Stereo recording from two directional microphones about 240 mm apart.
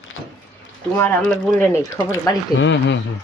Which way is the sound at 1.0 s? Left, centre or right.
Centre.